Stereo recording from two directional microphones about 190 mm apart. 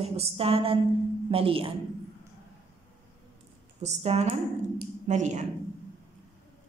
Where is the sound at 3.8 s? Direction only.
35° right (ahead or behind).